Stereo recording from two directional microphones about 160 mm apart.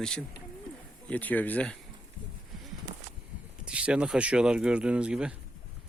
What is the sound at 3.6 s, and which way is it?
Speech, 5° right (ahead or behind).